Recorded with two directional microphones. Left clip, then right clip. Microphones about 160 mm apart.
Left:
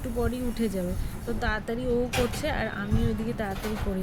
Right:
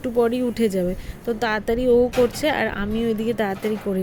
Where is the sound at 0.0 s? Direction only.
45° right (ahead or behind).